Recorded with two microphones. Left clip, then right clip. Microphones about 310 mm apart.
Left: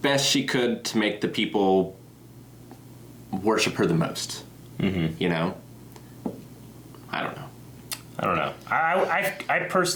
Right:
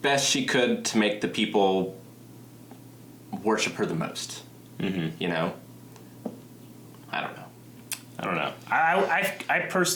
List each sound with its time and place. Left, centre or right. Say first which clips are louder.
0.0 s speech: left 1 dB; right
3.4 s speech: left 3 dB; right
4.8 s speech: left 3 dB; left
5.2 s speech: left 1 dB; right
7.1 s a sound: left 1 dB; right
8.1 s speech: left 4 dB; left